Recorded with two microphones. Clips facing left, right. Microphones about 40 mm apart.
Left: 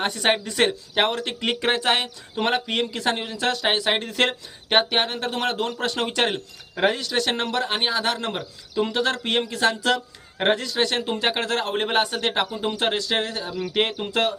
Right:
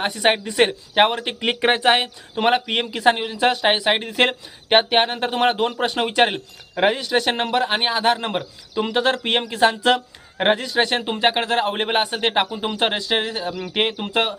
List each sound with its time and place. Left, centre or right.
0.0 s speech: centre